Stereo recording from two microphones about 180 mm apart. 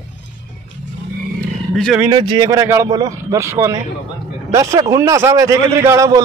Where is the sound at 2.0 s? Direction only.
25° right (ahead or behind).